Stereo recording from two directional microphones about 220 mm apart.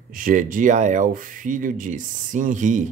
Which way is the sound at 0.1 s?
40° right (ahead or behind).